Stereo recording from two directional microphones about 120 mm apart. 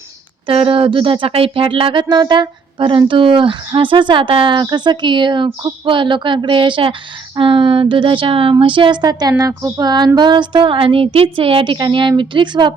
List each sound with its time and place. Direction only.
0.4 s a woman's voice: 50° right (ahead or behind)